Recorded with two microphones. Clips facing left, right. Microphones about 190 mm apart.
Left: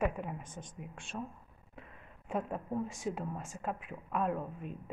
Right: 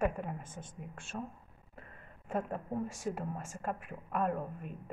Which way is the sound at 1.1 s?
40° right (ahead or behind).